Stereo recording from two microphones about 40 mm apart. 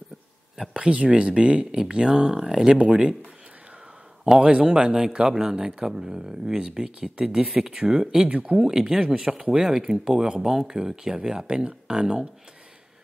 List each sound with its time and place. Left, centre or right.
0.7 s speech: right
2.8 s speech: right
4.4 s speech: right
8.3 s speech: right
8.6 s speech: centre